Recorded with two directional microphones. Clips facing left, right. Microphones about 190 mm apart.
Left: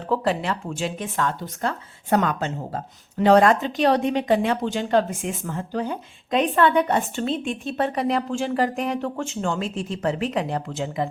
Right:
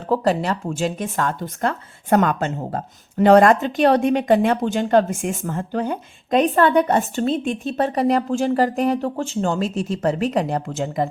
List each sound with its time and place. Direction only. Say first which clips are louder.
0.1 s speech: right 4 dB; 40° right (ahead or behind)